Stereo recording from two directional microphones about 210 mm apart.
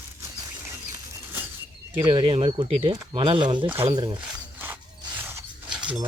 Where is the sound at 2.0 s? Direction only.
25° right (ahead or behind).